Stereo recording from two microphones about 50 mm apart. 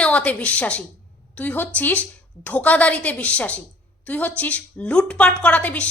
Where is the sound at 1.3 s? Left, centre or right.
Left.